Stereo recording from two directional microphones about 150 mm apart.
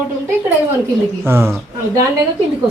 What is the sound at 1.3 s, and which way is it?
Speech, 15° right (ahead or behind).